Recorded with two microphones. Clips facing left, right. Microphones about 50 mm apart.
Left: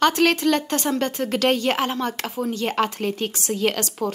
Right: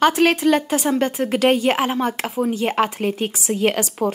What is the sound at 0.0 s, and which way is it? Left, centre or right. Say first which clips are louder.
A woman's voice: right 3 dB; centre.